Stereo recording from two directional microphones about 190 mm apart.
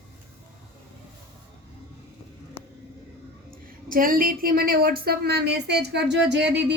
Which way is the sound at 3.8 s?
50° right (ahead or behind).